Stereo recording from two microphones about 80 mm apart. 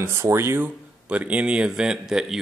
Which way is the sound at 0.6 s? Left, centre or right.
Centre.